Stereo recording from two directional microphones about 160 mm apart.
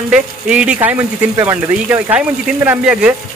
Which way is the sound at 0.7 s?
15° right (ahead or behind).